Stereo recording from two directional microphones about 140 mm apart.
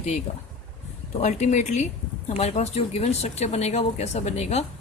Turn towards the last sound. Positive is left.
turn(degrees=50)  # may be behind; listen again after turning